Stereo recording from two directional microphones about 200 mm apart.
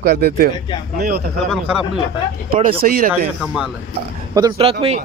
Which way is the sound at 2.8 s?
45° right (ahead or behind).